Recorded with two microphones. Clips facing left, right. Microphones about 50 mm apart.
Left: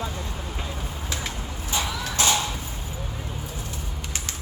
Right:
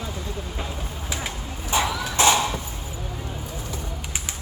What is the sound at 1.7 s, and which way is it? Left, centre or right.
Horse, right.